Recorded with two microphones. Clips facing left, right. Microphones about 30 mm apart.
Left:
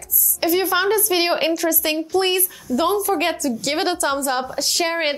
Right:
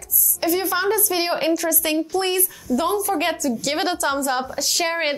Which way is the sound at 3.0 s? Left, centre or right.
Centre.